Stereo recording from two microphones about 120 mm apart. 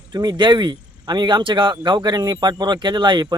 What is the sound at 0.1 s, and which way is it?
Speech, 35° right (ahead or behind).